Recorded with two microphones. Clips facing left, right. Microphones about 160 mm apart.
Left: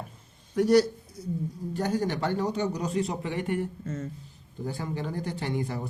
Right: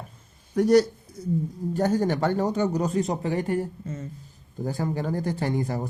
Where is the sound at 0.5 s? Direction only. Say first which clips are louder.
Right 2 dB; 45° right (ahead or behind).